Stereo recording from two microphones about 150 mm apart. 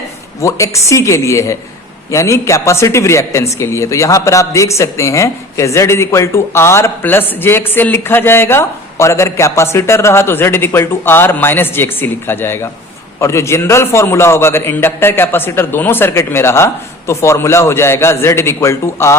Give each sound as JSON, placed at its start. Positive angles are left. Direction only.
{"t": 0.4, "sound": "a woman's voice", "side_deg": 20}